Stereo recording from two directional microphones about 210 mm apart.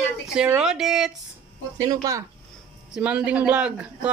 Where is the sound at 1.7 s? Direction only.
15° right (ahead or behind).